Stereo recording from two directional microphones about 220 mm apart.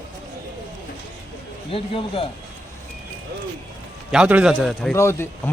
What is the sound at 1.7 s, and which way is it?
Speech, 25° left (ahead or behind).